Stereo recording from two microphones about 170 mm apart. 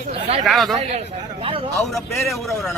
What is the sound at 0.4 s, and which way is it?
Speech, centre (ahead or behind).